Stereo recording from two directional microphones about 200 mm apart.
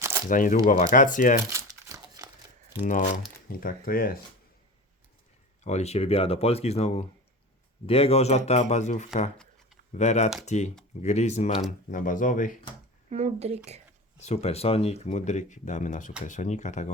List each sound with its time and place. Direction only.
0.3 s speech: 40° left (ahead or behind)
1.5 s crumpling: 15° right (ahead or behind)
2.8 s speech: 40° left (ahead or behind)
5.6 s speech: 35° left (ahead or behind)
13.1 s speech: 35° right (ahead or behind)
14.2 s speech: 35° left (ahead or behind)